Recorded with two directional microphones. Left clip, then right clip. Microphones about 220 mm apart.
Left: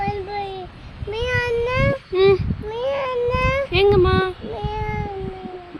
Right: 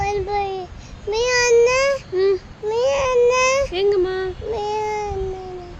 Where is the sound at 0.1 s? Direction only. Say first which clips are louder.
Right 5 dB; 20° right (ahead or behind).